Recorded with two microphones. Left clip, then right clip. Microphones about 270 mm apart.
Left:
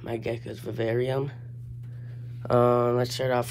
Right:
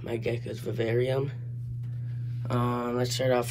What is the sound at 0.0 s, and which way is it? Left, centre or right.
Speech, centre.